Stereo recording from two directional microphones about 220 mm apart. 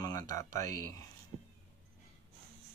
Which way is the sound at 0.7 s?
90° right.